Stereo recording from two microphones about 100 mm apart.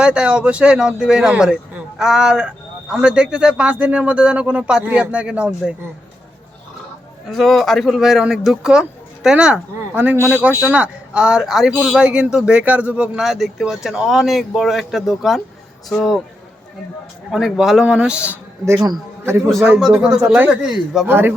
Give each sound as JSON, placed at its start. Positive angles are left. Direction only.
{"t": 0.0, "sound": "speech", "side_deg": -10}
{"t": 7.3, "sound": "speech", "side_deg": 0}
{"t": 17.3, "sound": "speech", "side_deg": -5}
{"t": 19.2, "sound": "a man's voice", "side_deg": -25}
{"t": 19.8, "sound": "speech", "side_deg": -10}
{"t": 21.1, "sound": "a man's voice", "side_deg": -20}